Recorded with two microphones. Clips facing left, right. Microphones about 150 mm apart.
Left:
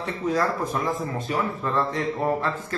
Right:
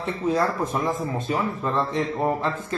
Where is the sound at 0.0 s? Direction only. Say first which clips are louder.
Right 1 dB; 25° right (ahead or behind).